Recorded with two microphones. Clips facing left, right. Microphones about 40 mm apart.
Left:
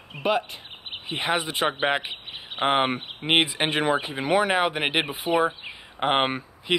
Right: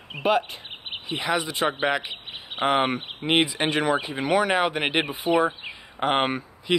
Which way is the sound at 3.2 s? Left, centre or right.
Left.